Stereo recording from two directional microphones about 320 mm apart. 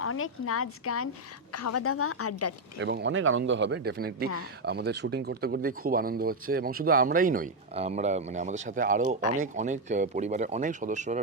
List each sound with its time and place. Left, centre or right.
0.0 s speech: left
2.7 s a man's voice: right